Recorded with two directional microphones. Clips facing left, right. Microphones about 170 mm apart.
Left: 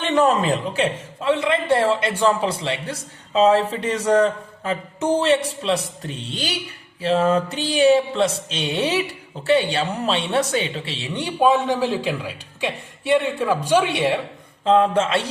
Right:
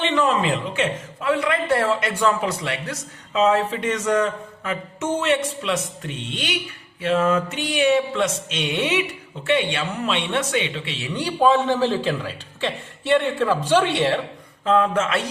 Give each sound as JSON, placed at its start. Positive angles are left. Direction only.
{"t": 0.0, "sound": "a man's voice", "side_deg": 45}
{"t": 14.6, "sound": "a man's voice", "side_deg": 30}